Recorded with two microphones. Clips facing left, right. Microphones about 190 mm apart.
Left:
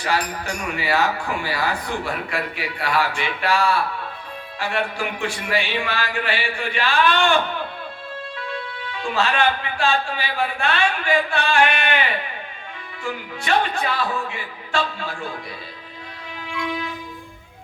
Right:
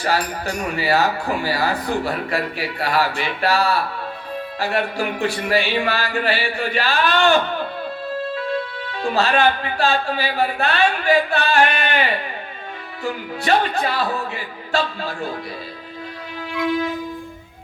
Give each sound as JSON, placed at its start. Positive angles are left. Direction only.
{"t": 0.0, "sound": "speech", "side_deg": -40}
{"t": 13.1, "sound": "speech", "side_deg": -35}